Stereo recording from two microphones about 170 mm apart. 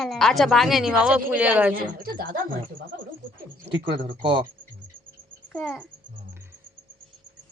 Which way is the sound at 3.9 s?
30° right (ahead or behind).